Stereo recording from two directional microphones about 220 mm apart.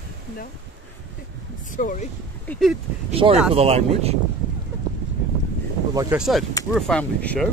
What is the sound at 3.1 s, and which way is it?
Speech, 25° right (ahead or behind).